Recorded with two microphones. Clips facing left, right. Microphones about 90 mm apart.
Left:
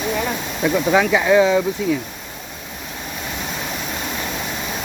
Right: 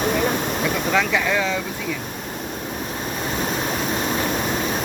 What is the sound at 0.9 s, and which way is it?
Speech, 20° left (ahead or behind).